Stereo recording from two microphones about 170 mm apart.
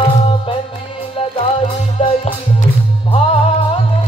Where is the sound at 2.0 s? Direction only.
35° left (ahead or behind).